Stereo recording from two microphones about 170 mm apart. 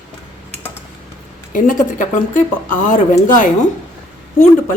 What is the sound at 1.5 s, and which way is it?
Speech, 50° left (ahead or behind).